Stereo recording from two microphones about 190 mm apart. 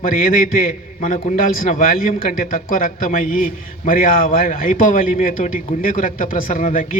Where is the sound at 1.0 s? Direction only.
40° left (ahead or behind).